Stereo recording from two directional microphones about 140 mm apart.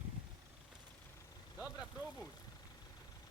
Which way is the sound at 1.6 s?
5° right (ahead or behind).